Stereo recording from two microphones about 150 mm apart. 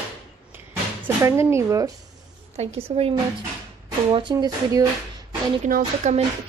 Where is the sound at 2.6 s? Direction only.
45° right (ahead or behind).